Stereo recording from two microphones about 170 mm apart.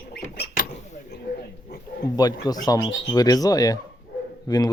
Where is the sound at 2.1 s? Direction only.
20° left (ahead or behind).